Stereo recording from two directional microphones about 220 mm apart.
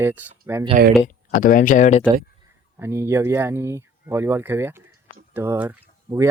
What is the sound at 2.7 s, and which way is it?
Speech, 10° right (ahead or behind).